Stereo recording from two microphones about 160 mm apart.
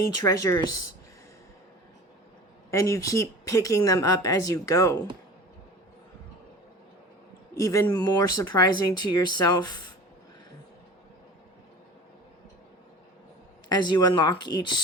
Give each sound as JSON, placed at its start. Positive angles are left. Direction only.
{"t": 0.2, "sound": "speech", "side_deg": 20}
{"t": 2.6, "sound": "speech", "side_deg": 20}
{"t": 7.6, "sound": "speech", "side_deg": 20}
{"t": 13.7, "sound": "speech", "side_deg": 25}